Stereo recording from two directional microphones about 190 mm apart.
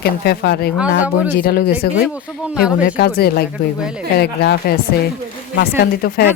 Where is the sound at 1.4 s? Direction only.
55° left (ahead or behind).